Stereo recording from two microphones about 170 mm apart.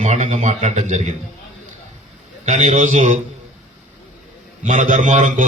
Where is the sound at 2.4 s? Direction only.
45° right (ahead or behind).